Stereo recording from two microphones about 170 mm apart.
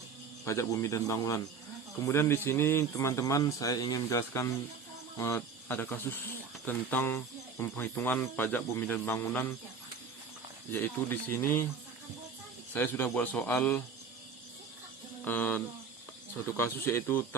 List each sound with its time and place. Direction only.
0.4 s a man's voice: 20° left (ahead or behind)
10.7 s a man's voice: 10° left (ahead or behind)
12.7 s a man's voice: 15° left (ahead or behind)
15.2 s a sound: 10° left (ahead or behind)
16.6 s a man's voice: 15° left (ahead or behind)